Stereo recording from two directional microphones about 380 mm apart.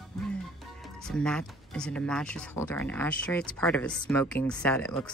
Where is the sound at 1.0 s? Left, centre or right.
Centre.